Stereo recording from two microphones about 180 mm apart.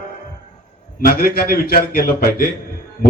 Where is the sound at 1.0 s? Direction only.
55° left (ahead or behind).